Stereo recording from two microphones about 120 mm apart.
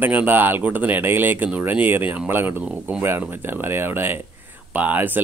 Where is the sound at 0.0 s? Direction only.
15° right (ahead or behind).